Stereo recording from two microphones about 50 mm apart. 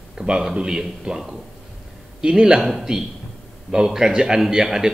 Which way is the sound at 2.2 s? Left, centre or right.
Centre.